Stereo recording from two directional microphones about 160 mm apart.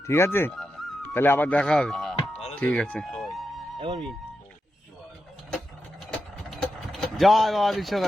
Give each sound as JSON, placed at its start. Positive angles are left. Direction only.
{"t": 0.0, "sound": "speech", "side_deg": 15}
{"t": 3.8, "sound": "speech", "side_deg": -35}
{"t": 6.1, "sound": "vehicle", "side_deg": 0}